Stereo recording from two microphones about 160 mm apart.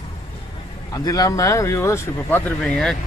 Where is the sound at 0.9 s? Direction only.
20° left (ahead or behind).